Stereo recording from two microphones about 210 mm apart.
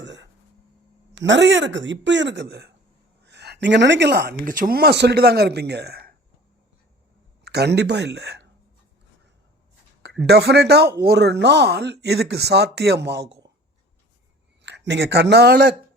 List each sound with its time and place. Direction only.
0.0 s a sound: 55° right (ahead or behind)
1.1 s speech: 60° right (ahead or behind)
7.4 s speech: 50° right (ahead or behind)
10.0 s a man's voice: 50° right (ahead or behind)
14.6 s speech: 55° right (ahead or behind)